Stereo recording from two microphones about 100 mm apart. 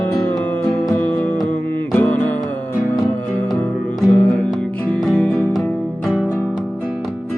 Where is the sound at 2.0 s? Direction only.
15° left (ahead or behind).